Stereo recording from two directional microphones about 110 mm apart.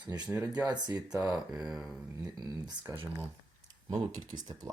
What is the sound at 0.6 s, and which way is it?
Speech, 40° right (ahead or behind).